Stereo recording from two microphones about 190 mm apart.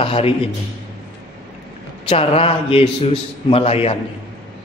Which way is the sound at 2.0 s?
30° left (ahead or behind).